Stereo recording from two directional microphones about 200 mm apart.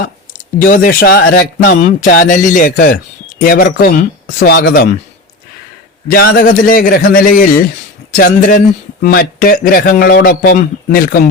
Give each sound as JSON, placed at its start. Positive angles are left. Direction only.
{"t": 0.6, "sound": "a man's voice", "side_deg": 45}
{"t": 6.1, "sound": "a man's voice", "side_deg": 50}